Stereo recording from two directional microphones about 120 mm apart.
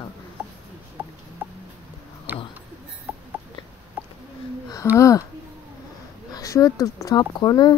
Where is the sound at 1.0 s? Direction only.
15° right (ahead or behind).